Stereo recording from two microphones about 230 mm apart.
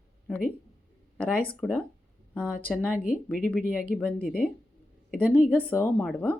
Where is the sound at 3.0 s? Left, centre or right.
Left.